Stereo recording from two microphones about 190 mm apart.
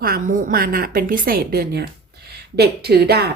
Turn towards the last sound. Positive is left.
turn(degrees=-60)  # may be behind; listen again after turning